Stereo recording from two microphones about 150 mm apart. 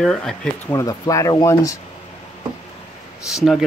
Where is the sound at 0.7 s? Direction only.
20° left (ahead or behind).